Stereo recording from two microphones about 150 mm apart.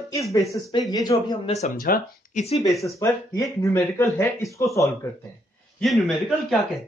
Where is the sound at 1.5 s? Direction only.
60° left (ahead or behind).